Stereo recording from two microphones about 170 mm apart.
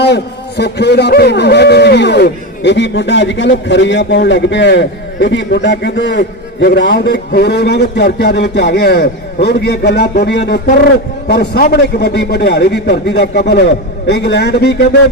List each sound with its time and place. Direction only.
0.0 s a man's voice: 80° left